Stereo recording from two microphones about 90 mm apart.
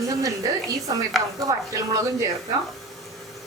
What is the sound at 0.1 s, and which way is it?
Speech, 40° right (ahead or behind).